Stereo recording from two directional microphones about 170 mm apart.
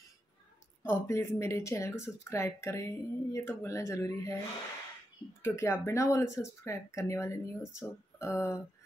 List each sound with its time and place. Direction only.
0.8 s speech: 15° left (ahead or behind)
5.4 s speech: 15° left (ahead or behind)